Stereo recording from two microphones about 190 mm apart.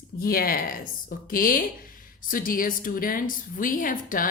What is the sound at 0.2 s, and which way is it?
A woman's voice, 50° left (ahead or behind).